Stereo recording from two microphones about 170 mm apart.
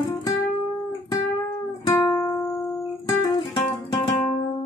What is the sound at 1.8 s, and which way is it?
Music, 15° left (ahead or behind).